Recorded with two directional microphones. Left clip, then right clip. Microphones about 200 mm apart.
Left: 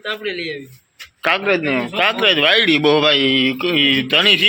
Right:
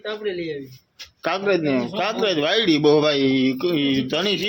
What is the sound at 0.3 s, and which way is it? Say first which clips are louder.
Speech: left 2 dB; 15° right (ahead or behind).